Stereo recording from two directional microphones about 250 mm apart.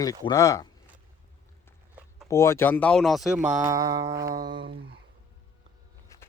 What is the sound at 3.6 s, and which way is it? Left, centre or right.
Music, centre.